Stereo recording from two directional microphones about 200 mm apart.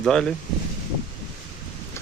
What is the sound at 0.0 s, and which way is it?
Speech, 5° left (ahead or behind).